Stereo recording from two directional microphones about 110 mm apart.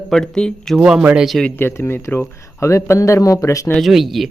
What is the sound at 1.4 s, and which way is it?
Speech, 20° left (ahead or behind).